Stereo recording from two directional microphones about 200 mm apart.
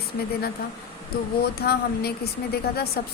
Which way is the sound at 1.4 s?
55° left (ahead or behind).